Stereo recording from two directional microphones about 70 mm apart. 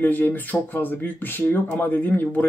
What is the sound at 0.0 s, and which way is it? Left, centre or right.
Speech, left.